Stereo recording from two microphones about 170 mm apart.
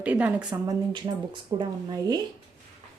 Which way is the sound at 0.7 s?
25° right (ahead or behind).